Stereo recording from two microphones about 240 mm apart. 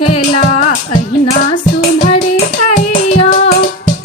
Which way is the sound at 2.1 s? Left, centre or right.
Left.